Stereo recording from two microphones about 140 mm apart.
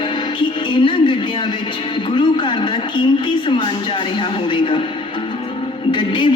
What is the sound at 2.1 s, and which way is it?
Speech, 35° left (ahead or behind).